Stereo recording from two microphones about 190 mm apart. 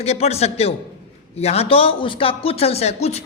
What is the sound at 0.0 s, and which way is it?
A man's voice, 35° left (ahead or behind).